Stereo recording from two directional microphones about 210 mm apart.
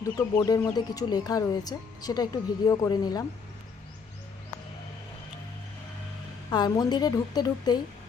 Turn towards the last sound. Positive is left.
turn(degrees=20)  # may be behind; listen again after turning